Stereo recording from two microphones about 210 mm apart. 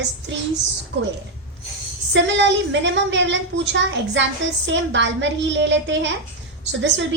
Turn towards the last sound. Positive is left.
turn(degrees=-60)  # may be behind; listen again after turning